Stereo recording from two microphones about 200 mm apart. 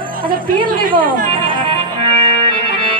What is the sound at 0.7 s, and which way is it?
Speech, 45° right (ahead or behind).